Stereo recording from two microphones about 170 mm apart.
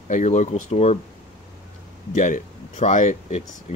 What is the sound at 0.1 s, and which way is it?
Speech, 45° left (ahead or behind).